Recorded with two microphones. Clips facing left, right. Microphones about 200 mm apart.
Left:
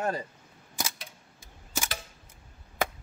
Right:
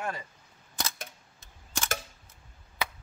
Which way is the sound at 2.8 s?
50° left (ahead or behind).